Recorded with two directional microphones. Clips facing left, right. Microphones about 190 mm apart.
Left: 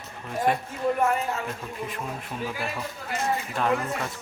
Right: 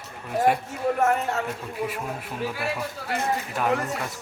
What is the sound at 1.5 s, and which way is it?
A man's voice, 10° right (ahead or behind).